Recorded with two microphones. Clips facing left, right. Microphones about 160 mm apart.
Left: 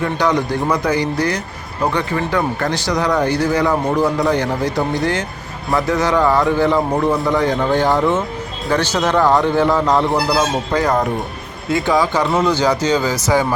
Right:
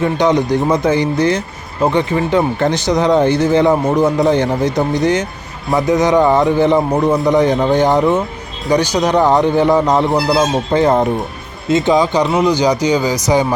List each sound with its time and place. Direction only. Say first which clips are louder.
0.0 s a man's voice: right 4 dB; 20° right (ahead or behind)